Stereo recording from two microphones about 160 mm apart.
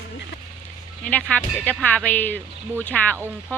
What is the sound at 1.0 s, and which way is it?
Speech, 10° left (ahead or behind).